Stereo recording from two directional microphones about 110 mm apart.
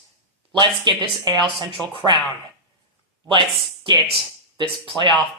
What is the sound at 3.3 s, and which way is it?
Speech, 45° right (ahead or behind).